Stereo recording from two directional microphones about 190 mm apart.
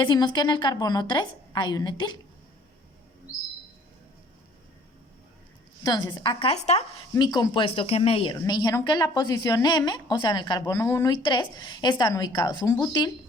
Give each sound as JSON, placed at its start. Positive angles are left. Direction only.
{"t": 0.0, "sound": "speech", "side_deg": 25}
{"t": 5.8, "sound": "speech", "side_deg": 15}
{"t": 6.4, "sound": "speech", "side_deg": 35}
{"t": 7.1, "sound": "speech", "side_deg": 20}